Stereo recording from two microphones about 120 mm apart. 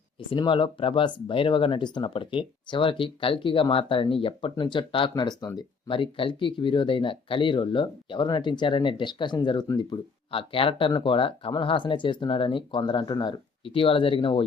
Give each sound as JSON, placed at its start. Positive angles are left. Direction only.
{"t": 0.2, "sound": "speech", "side_deg": 45}
{"t": 10.3, "sound": "speech", "side_deg": 50}
{"t": 13.7, "sound": "speech", "side_deg": 50}